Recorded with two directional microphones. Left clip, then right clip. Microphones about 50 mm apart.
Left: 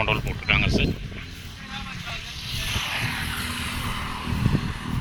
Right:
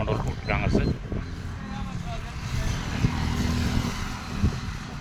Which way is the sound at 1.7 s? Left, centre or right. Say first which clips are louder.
Left 5 dB; right.